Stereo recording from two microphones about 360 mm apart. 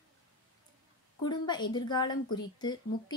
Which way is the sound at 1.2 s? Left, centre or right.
Centre.